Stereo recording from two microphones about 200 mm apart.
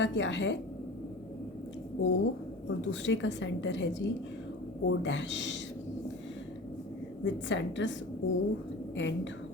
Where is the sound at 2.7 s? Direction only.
65° left (ahead or behind).